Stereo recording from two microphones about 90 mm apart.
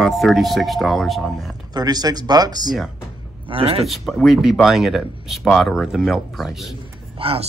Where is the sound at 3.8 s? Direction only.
Centre (ahead or behind).